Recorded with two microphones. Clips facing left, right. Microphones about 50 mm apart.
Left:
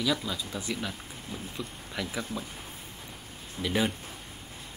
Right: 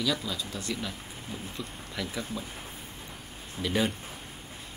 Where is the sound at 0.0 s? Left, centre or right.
Centre.